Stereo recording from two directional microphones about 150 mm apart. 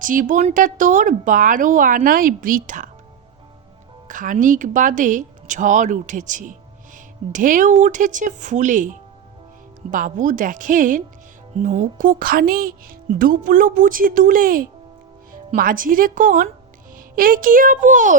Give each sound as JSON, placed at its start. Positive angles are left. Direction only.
{"t": 0.0, "sound": "a woman's voice", "side_deg": -60}
{"t": 4.1, "sound": "a woman's voice", "side_deg": -60}